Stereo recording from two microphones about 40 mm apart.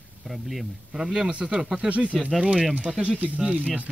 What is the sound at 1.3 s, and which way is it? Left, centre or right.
Speech, right.